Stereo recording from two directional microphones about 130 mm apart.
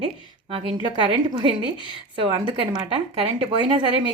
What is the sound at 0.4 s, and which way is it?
Speech, 50° right (ahead or behind).